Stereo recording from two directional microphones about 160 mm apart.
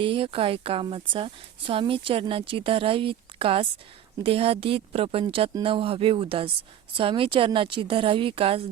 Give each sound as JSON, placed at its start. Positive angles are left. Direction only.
{"t": 0.0, "sound": "a woman's voice", "side_deg": -35}